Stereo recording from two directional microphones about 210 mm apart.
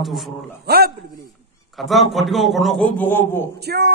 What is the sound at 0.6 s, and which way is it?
Female singing, 50° right (ahead or behind).